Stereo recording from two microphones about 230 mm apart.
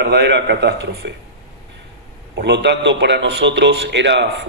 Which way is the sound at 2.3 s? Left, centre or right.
Right.